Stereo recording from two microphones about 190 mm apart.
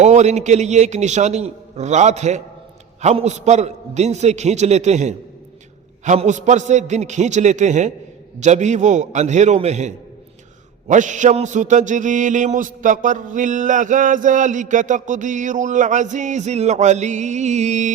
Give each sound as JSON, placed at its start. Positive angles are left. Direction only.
{"t": 0.0, "sound": "mantra", "side_deg": -35}